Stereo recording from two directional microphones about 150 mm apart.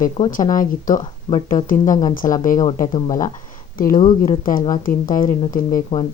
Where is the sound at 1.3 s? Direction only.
25° left (ahead or behind).